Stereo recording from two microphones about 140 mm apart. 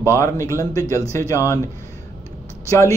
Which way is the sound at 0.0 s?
20° left (ahead or behind).